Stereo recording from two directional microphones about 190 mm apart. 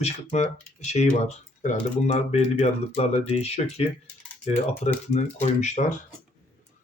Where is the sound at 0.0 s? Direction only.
35° left (ahead or behind).